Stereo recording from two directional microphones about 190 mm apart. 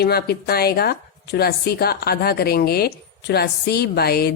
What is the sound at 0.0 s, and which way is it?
A woman's voice, 55° left (ahead or behind).